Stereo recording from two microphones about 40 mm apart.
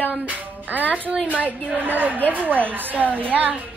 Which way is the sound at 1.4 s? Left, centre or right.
Right.